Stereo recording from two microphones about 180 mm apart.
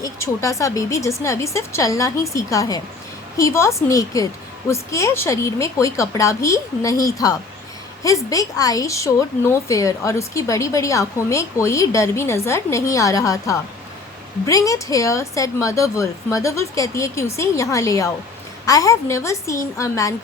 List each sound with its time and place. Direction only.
0.0 s a woman's voice: 15° left (ahead or behind)